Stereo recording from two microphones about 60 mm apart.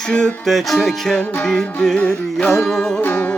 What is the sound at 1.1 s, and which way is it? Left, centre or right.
Music, left.